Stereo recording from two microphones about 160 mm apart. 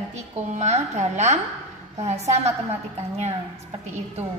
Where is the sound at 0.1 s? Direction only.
45° right (ahead or behind).